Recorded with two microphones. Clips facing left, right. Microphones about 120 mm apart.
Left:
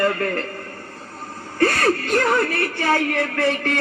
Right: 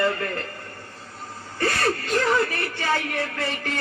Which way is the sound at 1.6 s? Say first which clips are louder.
Left 5 dB; 55° left (ahead or behind).